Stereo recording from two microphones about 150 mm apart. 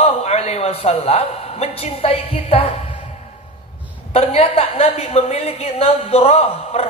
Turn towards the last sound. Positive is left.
turn(degrees=45)  # may be behind; listen again after turning